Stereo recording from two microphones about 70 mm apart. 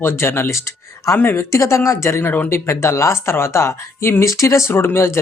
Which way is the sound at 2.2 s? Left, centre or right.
Left.